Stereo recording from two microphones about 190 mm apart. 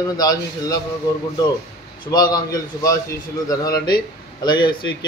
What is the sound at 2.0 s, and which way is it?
Speech, 20° left (ahead or behind).